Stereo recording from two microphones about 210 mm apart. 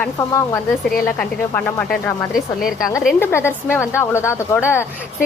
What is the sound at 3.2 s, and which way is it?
Speech, 10° left (ahead or behind).